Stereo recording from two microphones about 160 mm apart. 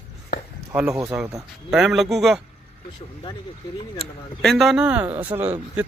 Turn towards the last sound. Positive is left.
turn(degrees=-15)  # may be behind; listen again after turning